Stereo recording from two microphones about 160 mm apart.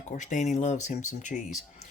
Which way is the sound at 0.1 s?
50° left (ahead or behind).